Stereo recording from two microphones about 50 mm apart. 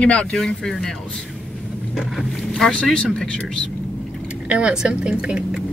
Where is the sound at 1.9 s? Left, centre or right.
Centre.